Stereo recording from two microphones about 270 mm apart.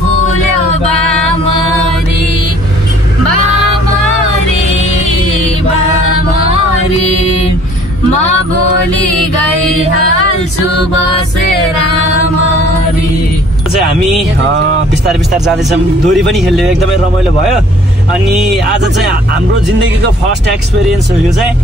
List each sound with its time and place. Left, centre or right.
16.1 s speech: centre